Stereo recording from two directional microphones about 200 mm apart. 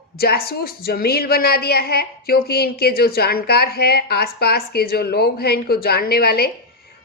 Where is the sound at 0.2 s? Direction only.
50° left (ahead or behind).